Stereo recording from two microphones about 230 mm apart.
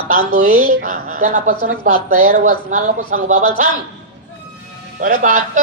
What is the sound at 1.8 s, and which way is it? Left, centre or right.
A woman's voice, right.